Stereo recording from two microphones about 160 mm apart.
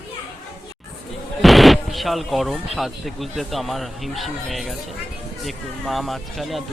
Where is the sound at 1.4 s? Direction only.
Centre (ahead or behind).